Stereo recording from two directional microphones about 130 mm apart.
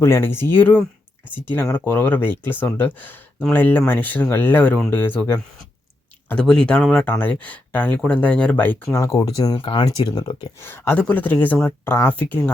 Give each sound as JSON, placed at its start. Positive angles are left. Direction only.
{"t": 0.0, "sound": "speech", "side_deg": 20}
{"t": 9.2, "sound": "speech", "side_deg": 25}
{"t": 9.6, "sound": "speech", "side_deg": 40}
{"t": 10.6, "sound": "speech", "side_deg": 15}